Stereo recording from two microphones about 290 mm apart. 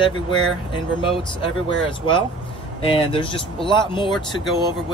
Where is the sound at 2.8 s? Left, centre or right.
Centre.